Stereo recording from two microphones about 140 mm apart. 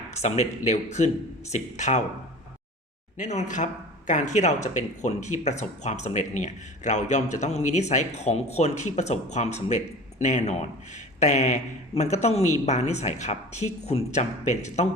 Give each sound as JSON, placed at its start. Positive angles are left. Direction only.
{"t": 0.2, "sound": "speech", "side_deg": 55}
{"t": 3.2, "sound": "speech", "side_deg": 60}